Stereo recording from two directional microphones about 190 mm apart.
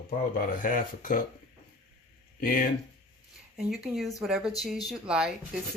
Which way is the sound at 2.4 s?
45° left (ahead or behind).